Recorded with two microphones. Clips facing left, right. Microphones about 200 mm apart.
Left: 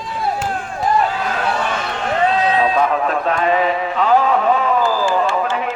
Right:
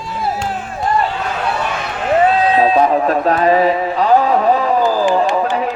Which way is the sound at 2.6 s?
30° right (ahead or behind).